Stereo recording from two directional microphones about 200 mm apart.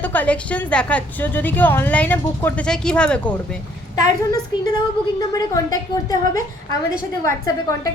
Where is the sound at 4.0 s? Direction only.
20° left (ahead or behind).